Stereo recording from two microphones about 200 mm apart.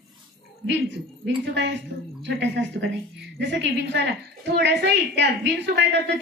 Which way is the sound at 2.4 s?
65° right (ahead or behind).